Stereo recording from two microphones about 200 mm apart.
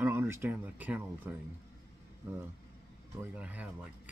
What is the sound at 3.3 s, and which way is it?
Speech, 5° right (ahead or behind).